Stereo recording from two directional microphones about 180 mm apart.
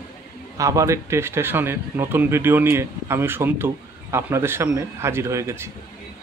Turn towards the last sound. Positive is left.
turn(degrees=-15)  # may be behind; listen again after turning